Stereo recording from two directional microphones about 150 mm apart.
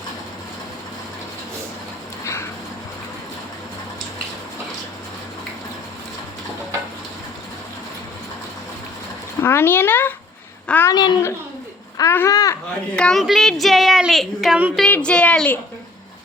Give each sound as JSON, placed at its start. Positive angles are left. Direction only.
{"t": 2.2, "sound": "a sound", "side_deg": 20}
{"t": 9.4, "sound": "a woman's voice", "side_deg": 15}
{"t": 11.9, "sound": "babbling", "side_deg": 20}
{"t": 13.0, "sound": "a woman's voice", "side_deg": 0}